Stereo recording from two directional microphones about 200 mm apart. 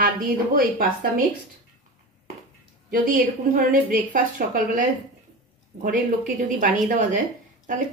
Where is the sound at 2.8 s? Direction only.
45° right (ahead or behind).